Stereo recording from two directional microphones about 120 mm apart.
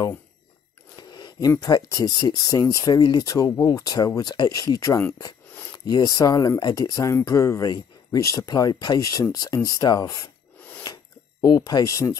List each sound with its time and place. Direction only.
0.9 s a sound: 35° left (ahead or behind)
1.5 s speech: 30° left (ahead or behind)
11.4 s speech: 30° left (ahead or behind)